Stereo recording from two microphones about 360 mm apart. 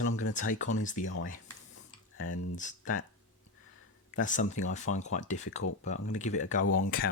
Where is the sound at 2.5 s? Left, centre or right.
Left.